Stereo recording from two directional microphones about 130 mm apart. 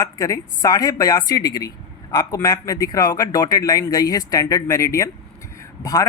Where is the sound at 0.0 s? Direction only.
25° left (ahead or behind).